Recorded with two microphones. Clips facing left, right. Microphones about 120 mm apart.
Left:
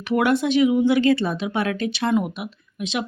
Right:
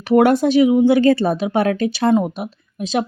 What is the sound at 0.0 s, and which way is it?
Speech, 40° right (ahead or behind).